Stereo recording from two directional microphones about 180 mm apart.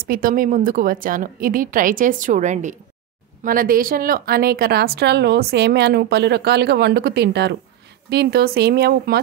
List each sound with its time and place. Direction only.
0.0 s a woman's voice: 50° right (ahead or behind)